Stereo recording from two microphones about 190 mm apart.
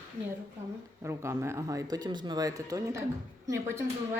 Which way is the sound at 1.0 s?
15° right (ahead or behind).